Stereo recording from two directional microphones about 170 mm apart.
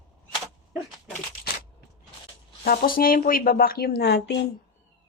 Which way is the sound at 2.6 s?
60° left (ahead or behind).